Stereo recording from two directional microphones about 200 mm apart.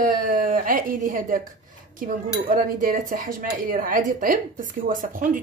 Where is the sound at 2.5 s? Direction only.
45° right (ahead or behind).